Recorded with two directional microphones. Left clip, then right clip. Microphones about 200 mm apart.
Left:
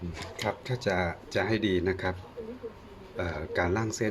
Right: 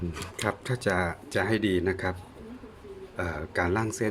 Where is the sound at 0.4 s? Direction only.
15° right (ahead or behind).